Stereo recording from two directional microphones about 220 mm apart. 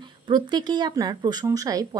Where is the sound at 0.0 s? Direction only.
20° right (ahead or behind).